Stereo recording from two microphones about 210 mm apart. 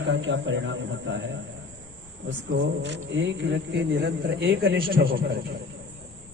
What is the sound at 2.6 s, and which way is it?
Speech, 55° right (ahead or behind).